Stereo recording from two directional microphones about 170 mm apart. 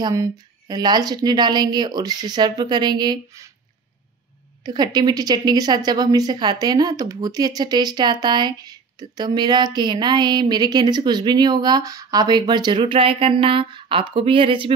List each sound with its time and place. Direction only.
0.0 s a woman's voice: 20° right (ahead or behind)
4.6 s a woman's voice: 25° right (ahead or behind)